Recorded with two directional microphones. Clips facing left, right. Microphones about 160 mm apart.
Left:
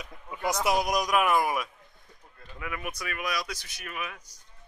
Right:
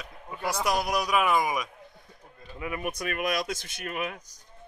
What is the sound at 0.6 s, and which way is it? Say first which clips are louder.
Speech: left 1 dB; 5° left (ahead or behind).